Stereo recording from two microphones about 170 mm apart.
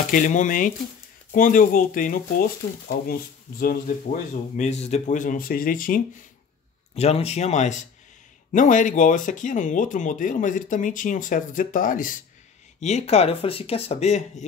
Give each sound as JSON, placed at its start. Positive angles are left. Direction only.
{"t": 0.1, "sound": "speech", "side_deg": 50}
{"t": 7.0, "sound": "speech", "side_deg": 40}
{"t": 12.8, "sound": "speech", "side_deg": 40}